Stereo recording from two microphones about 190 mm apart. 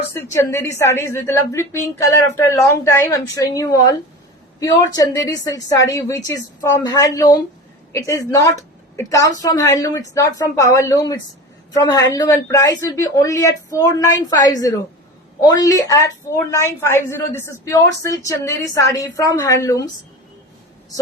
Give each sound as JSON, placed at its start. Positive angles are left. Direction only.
{"t": 0.1, "sound": "a woman's voice", "side_deg": 15}